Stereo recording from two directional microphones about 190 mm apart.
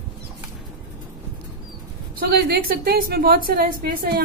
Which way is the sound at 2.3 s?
55° right (ahead or behind).